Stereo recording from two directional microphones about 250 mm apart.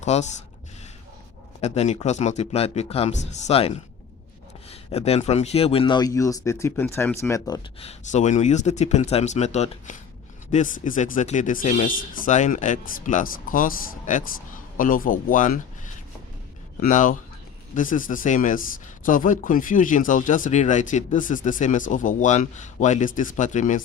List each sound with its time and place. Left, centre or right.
0.0 s speech: left
1.6 s speech: left
16.8 s speech: left